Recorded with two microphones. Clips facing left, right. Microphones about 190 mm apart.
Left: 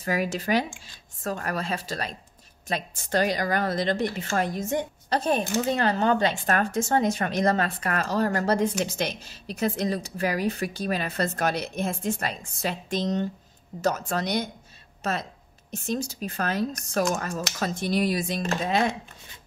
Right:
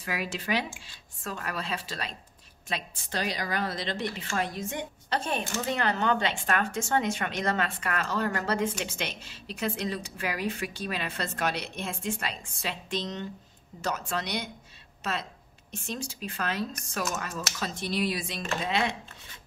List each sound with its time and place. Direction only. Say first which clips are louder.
0.0 s a woman's voice: left 7 dB; 45° left (ahead or behind)